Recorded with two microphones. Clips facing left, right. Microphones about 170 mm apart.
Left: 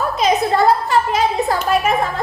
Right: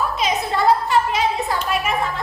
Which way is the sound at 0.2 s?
40° left (ahead or behind).